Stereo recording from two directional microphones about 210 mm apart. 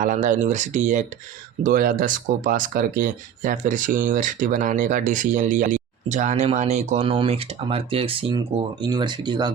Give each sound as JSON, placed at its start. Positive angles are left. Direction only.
{"t": 0.0, "sound": "speech", "side_deg": -35}